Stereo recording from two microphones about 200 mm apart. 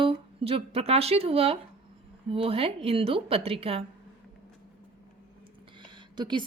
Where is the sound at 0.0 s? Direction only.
25° right (ahead or behind).